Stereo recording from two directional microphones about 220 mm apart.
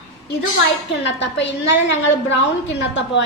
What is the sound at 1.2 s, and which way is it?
Speech, 55° left (ahead or behind).